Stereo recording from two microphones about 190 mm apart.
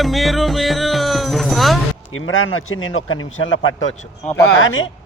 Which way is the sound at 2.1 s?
90° left.